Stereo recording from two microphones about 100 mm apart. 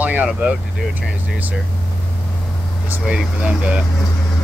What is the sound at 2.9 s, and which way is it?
Speech, 15° right (ahead or behind).